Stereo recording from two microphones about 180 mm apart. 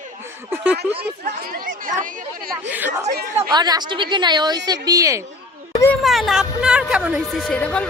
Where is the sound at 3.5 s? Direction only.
25° right (ahead or behind).